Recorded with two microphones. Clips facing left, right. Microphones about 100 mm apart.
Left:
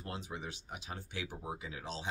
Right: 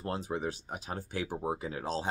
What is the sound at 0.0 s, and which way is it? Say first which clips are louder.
Speech: right 9 dB; 40° right (ahead or behind).